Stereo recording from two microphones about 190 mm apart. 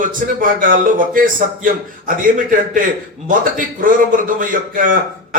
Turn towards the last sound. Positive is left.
turn(degrees=-45)  # may be behind; listen again after turning